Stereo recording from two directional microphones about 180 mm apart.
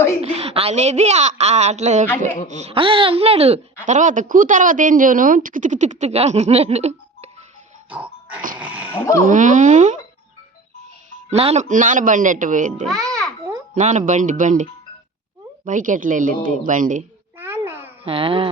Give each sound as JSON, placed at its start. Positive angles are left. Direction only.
{"t": 0.2, "sound": "a woman's voice", "side_deg": -35}
{"t": 7.9, "sound": "music", "side_deg": -10}
{"t": 8.5, "sound": "speech", "side_deg": -10}
{"t": 9.2, "sound": "speech", "side_deg": -45}
{"t": 11.3, "sound": "speech", "side_deg": -35}
{"t": 12.8, "sound": "a child's voice", "side_deg": 0}
{"t": 13.7, "sound": "speech", "side_deg": -45}
{"t": 17.3, "sound": "a sound", "side_deg": -10}
{"t": 18.0, "sound": "a woman's voice", "side_deg": -30}